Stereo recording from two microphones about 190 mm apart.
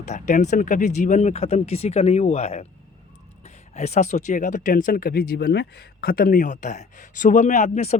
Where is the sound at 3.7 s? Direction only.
35° left (ahead or behind).